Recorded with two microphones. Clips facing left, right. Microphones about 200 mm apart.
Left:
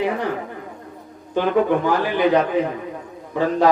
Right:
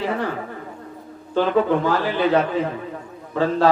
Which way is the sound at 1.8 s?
15° left (ahead or behind).